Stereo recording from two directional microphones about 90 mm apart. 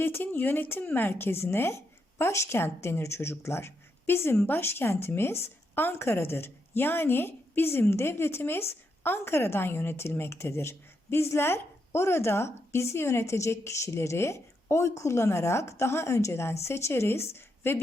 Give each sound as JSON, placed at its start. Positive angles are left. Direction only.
{"t": 0.0, "sound": "a woman's voice", "side_deg": 25}